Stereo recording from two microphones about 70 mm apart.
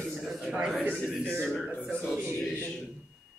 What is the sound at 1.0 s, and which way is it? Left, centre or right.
Speech, left.